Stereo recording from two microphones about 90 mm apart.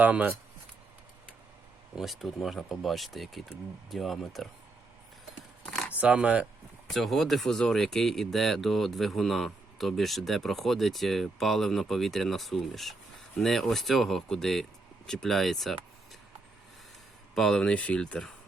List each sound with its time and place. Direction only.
0.0 s speech: 20° right (ahead or behind)
2.0 s speech: centre (ahead or behind)
5.6 s a sound: centre (ahead or behind)
5.9 s speech: 15° right (ahead or behind)
6.9 s speech: centre (ahead or behind)
17.3 s speech: 5° left (ahead or behind)